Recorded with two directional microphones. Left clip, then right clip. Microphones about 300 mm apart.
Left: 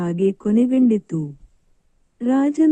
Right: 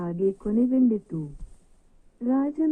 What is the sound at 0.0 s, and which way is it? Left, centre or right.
Speech, left.